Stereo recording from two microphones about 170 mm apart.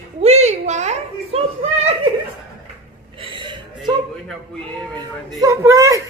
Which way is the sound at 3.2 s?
30° right (ahead or behind).